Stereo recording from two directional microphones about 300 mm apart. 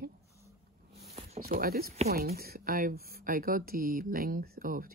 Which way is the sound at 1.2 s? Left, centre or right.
Right.